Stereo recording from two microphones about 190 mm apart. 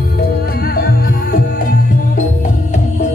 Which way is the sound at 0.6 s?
50° left (ahead or behind).